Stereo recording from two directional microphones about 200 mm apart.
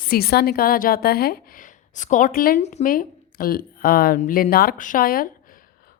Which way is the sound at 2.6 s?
35° left (ahead or behind).